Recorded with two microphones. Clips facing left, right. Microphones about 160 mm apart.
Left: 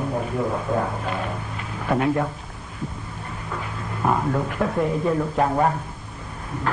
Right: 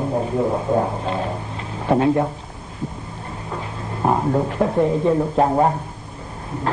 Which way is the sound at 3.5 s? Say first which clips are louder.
Right 2 dB; 30° right (ahead or behind).